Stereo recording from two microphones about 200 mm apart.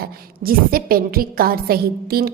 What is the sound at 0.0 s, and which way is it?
A woman's voice, 45° right (ahead or behind).